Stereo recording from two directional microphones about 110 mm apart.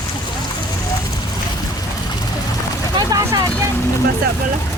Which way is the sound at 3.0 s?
35° right (ahead or behind).